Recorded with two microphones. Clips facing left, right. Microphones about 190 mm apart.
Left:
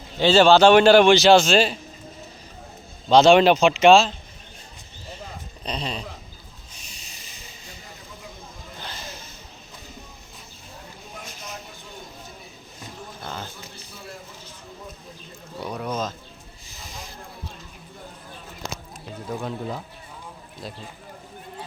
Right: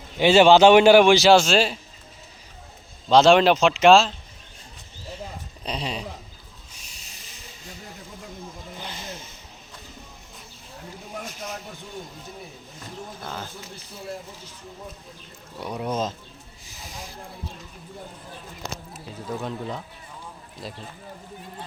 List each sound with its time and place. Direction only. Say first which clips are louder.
0.2 s a man's voice: right 1 dB; 15° right (ahead or behind)
3.1 s speech: left 1 dB; centre (ahead or behind)
5.6 s a man's voice: even; 10° right (ahead or behind)
6.7 s hiss: left 2 dB; 5° right (ahead or behind)
8.8 s snake: right 1 dB; 20° right (ahead or behind)
13.2 s a sound: left 1 dB; 5° right (ahead or behind)
15.6 s speech: right 1 dB; 20° right (ahead or behind)
16.8 s a sound: right 1 dB; 10° right (ahead or behind)
19.3 s speech: left 1 dB; 5° left (ahead or behind)